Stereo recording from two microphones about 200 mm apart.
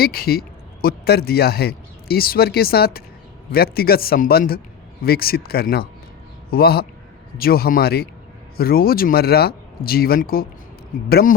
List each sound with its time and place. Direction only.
0.0 s speech: 50° left (ahead or behind)